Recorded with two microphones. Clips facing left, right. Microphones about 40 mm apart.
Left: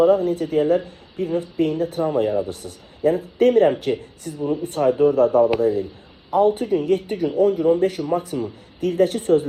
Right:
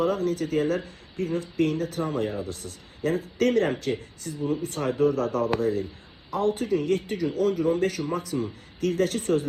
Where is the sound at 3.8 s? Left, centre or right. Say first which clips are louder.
Left 5 dB; left.